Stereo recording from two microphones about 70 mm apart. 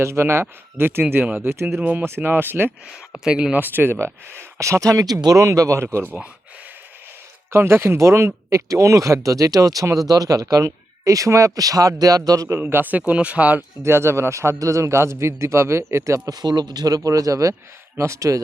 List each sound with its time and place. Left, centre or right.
0.0 s a man's voice: right
1.4 s a man's voice: right
1.7 s a man's voice: right
3.2 s speech: centre
3.5 s speech: right
7.5 s speech: right
12.5 s speech: right
13.8 s a man's voice: right
16.3 s speech: right
17.9 s speech: right